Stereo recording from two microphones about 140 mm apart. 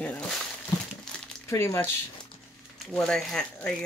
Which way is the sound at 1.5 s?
20° left (ahead or behind).